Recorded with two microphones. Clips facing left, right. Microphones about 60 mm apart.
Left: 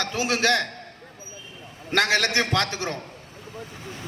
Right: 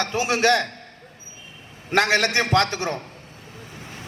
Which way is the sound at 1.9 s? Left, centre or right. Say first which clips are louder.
Right 2 dB; right.